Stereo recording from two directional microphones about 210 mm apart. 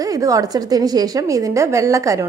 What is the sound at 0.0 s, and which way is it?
A woman's voice, 15° right (ahead or behind).